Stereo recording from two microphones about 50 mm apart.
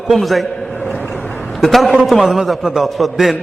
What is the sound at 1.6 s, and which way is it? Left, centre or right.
A man's voice, centre.